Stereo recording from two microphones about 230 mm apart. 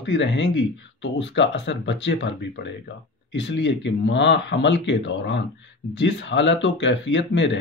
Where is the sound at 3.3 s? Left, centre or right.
Left.